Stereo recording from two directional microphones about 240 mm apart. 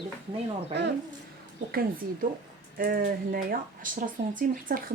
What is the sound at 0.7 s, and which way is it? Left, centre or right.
Speech, right.